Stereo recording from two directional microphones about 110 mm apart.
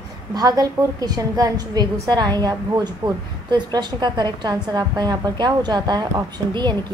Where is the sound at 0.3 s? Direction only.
35° right (ahead or behind).